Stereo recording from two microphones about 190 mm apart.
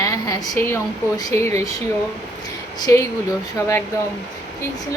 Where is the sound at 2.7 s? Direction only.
20° left (ahead or behind).